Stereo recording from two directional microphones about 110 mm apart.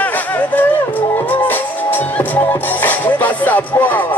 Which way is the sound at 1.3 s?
15° left (ahead or behind).